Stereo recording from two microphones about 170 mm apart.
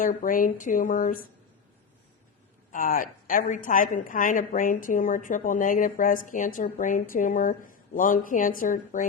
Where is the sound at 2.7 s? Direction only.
55° left (ahead or behind).